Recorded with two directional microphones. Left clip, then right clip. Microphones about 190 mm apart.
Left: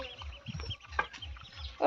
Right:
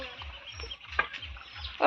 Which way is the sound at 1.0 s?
60° left (ahead or behind).